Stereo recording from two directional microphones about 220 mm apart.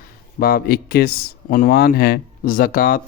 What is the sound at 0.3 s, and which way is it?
Speech, 40° left (ahead or behind).